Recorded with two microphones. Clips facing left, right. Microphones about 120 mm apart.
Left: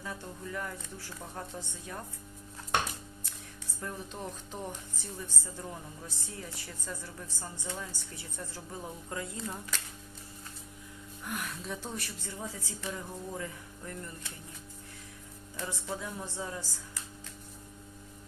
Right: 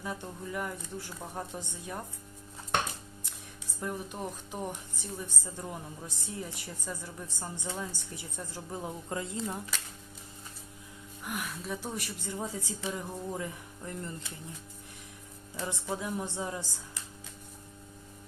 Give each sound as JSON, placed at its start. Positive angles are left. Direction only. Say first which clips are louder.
{"t": 0.0, "sound": "speech", "louder": "right 3 dB", "side_deg": -15}
{"t": 3.8, "sound": "speech", "louder": "right 4 dB", "side_deg": -15}
{"t": 11.3, "sound": "speech", "louder": "right 2 dB", "side_deg": -5}
{"t": 15.5, "sound": "a woman's voice", "louder": "right 3 dB", "side_deg": -20}